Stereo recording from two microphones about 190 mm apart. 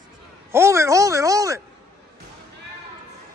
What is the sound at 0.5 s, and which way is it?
Speech, 15° right (ahead or behind).